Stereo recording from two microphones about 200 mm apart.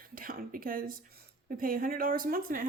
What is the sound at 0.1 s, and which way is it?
Speech, 45° right (ahead or behind).